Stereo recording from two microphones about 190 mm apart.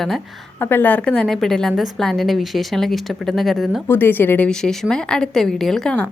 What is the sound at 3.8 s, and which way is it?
A woman's voice, 10° left (ahead or behind).